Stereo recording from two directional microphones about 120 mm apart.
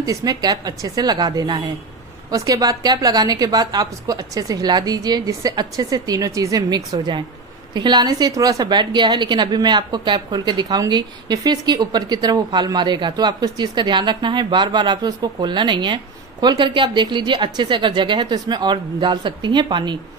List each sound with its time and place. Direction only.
0.0 s a woman's voice: 30° right (ahead or behind)